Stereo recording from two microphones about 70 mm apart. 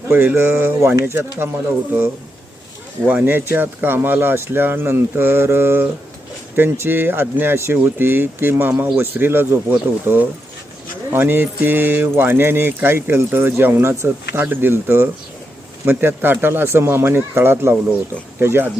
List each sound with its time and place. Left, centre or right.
0.1 s speech: right
3.1 s speech: right